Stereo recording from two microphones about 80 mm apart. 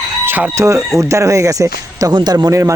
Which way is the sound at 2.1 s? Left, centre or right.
Right.